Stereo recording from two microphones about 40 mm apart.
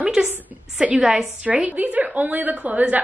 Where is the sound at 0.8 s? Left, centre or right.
Right.